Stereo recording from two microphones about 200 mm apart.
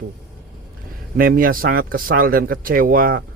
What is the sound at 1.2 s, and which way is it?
A man's voice, 45° right (ahead or behind).